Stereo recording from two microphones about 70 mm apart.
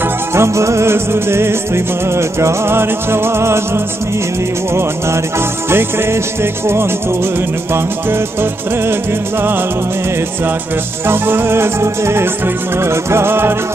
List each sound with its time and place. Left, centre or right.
0.3 s music: right
7.7 s music: right
11.1 s music: right